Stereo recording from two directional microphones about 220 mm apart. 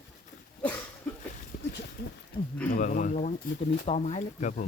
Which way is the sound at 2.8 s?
35° left (ahead or behind).